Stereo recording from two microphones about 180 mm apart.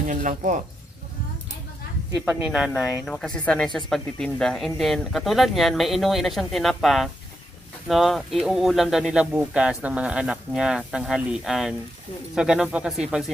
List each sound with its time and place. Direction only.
0.1 s speech: 45° right (ahead or behind)
2.2 s speech: 5° right (ahead or behind)